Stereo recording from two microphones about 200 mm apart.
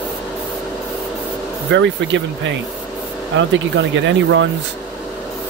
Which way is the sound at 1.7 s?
65° right (ahead or behind).